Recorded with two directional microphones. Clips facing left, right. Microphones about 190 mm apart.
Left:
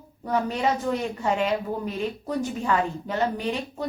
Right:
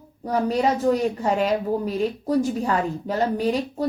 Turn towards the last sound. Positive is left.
turn(degrees=-35)  # may be behind; listen again after turning